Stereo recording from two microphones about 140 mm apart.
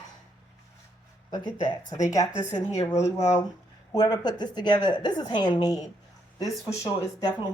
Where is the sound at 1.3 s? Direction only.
35° left (ahead or behind).